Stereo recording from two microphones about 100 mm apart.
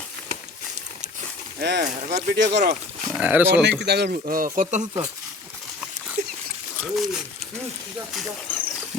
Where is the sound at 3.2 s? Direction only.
15° right (ahead or behind).